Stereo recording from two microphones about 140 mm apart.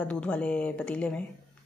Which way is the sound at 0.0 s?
10° left (ahead or behind).